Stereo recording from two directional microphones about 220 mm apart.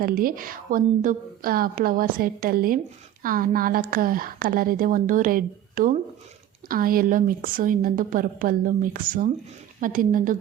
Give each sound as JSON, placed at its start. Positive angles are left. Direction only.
{"t": 0.0, "sound": "a woman's voice", "side_deg": -40}